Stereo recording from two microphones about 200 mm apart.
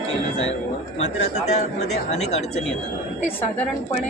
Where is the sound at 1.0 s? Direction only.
35° left (ahead or behind).